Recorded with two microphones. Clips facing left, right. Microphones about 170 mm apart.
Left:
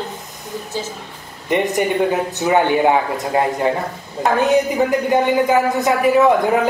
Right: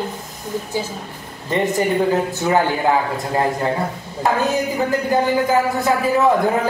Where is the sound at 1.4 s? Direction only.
20° left (ahead or behind).